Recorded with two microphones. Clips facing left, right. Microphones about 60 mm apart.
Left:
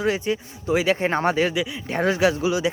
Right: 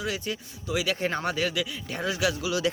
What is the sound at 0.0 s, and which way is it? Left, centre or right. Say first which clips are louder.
Speech: left 9 dB; left.